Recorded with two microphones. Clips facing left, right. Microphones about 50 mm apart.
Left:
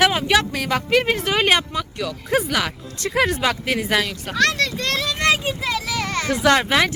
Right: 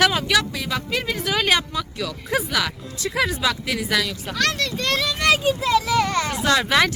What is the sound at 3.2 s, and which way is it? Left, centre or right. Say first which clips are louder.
Speech: left 2 dB; left.